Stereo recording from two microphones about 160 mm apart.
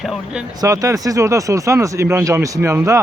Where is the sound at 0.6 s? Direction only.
20° right (ahead or behind).